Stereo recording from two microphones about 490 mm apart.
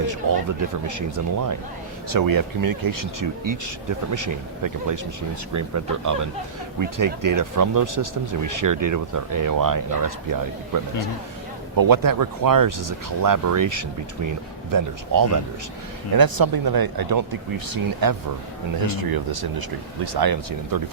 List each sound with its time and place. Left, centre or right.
0.0 s speech: right